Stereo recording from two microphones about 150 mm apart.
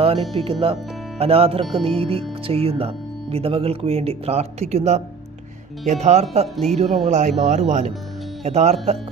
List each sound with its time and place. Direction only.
0.0 s speech: 40° right (ahead or behind)